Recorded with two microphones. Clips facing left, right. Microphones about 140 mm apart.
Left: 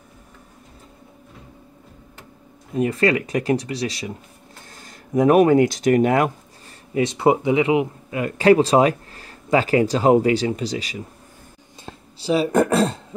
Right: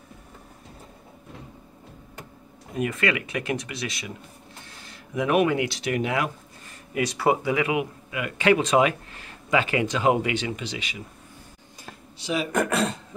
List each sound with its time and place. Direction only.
2.8 s speech: 35° left (ahead or behind)
6.9 s speech: 25° left (ahead or behind)